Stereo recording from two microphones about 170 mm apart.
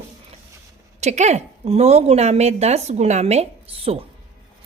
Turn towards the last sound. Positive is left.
turn(degrees=-35)  # may be behind; listen again after turning